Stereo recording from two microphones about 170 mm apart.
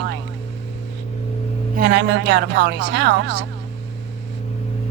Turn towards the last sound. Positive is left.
turn(degrees=-90)